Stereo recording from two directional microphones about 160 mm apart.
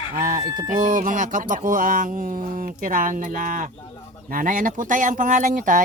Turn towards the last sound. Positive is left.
turn(degrees=-55)  # may be behind; listen again after turning